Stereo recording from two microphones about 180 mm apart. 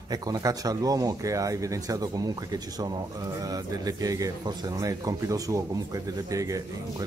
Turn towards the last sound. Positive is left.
turn(degrees=-20)  # may be behind; listen again after turning